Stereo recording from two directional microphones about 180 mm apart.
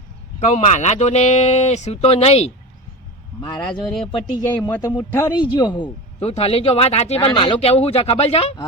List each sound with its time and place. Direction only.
0.3 s speech: 40° left (ahead or behind)
3.4 s speech: 25° left (ahead or behind)